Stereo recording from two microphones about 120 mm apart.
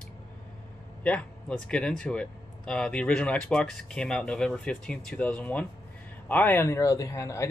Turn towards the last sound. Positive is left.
turn(degrees=25)  # may be behind; listen again after turning